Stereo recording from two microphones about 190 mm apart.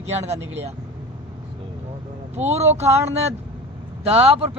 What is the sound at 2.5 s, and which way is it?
Speech, 35° right (ahead or behind).